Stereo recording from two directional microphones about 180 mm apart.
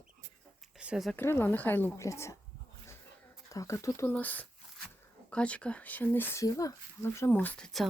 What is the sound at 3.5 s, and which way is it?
Speech, 15° left (ahead or behind).